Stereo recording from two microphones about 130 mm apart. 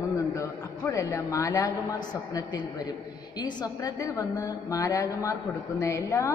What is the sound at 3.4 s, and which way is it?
A woman's voice, 30° left (ahead or behind).